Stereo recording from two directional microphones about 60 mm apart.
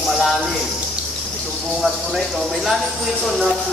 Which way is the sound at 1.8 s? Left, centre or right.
Centre.